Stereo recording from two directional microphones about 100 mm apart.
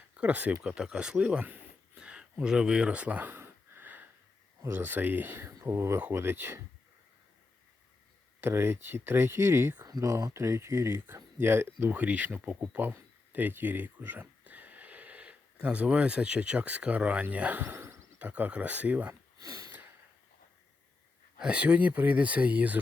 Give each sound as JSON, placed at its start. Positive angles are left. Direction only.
{"t": 0.2, "sound": "speech", "side_deg": -15}
{"t": 8.4, "sound": "speech", "side_deg": -25}
{"t": 9.8, "sound": "speech", "side_deg": -35}
{"t": 19.4, "sound": "a sound", "side_deg": -35}
{"t": 21.3, "sound": "speech", "side_deg": -10}